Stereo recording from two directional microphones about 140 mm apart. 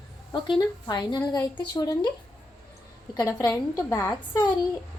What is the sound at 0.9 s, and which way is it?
A woman's voice, 30° left (ahead or behind).